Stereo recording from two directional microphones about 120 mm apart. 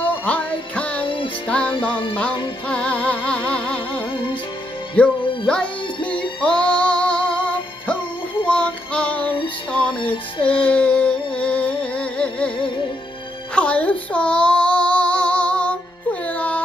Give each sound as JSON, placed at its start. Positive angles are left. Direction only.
{"t": 0.0, "sound": "music", "side_deg": 10}
{"t": 1.0, "sound": "music", "side_deg": 45}
{"t": 1.5, "sound": "music", "side_deg": 10}
{"t": 5.2, "sound": "music", "side_deg": 45}
{"t": 6.4, "sound": "music", "side_deg": 10}
{"t": 13.6, "sound": "child singing", "side_deg": 10}